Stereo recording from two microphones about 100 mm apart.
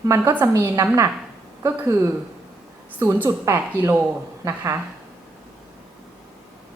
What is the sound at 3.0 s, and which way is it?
A woman's voice, 20° right (ahead or behind).